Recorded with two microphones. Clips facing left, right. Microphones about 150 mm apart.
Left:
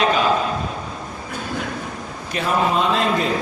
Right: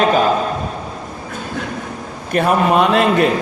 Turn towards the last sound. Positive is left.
turn(degrees=-65)  # may be behind; listen again after turning